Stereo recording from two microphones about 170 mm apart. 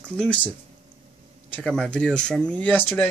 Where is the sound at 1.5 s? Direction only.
5° left (ahead or behind).